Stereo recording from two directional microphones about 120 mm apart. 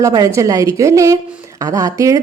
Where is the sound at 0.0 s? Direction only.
30° right (ahead or behind).